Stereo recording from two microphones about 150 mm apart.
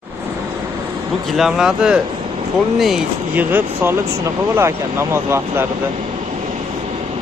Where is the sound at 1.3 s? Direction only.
5° right (ahead or behind).